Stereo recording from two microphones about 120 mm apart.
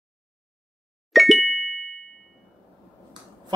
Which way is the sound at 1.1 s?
Centre (ahead or behind).